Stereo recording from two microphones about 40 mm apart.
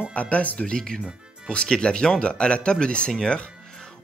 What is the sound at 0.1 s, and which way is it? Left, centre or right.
Speech, left.